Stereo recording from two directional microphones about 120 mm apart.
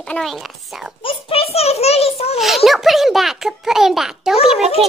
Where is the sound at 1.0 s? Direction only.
55° left (ahead or behind).